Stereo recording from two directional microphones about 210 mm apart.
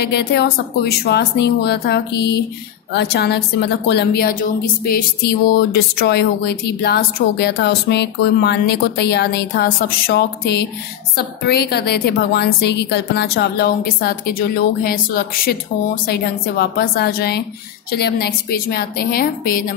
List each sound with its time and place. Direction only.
0.0 s a woman's voice: 50° left (ahead or behind)